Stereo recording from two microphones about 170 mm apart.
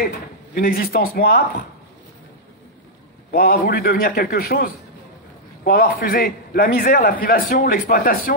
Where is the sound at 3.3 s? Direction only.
60° left (ahead or behind).